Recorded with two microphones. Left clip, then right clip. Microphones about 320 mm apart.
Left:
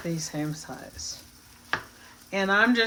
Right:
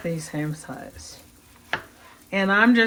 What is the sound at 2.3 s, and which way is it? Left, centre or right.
Speech, right.